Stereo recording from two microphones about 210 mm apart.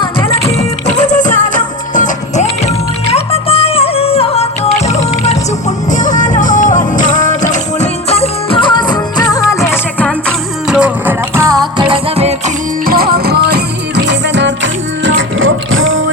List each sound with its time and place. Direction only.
0.0 s music: 20° left (ahead or behind)
0.9 s music: 35° left (ahead or behind); by 10.8 s 5° left (ahead or behind)
10.8 s music: 10° right (ahead or behind)
11.8 s music: 25° right (ahead or behind)
12.8 s music: 45° right (ahead or behind); by 16.0 s 70° right (ahead or behind)